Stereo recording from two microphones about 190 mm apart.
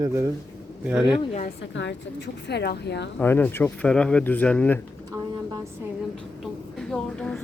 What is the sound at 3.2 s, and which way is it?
Speech, 10° left (ahead or behind).